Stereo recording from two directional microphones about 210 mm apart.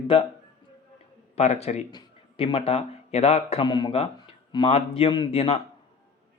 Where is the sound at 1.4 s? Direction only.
30° left (ahead or behind).